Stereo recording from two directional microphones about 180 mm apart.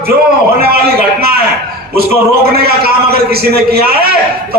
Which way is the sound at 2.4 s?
60° right (ahead or behind).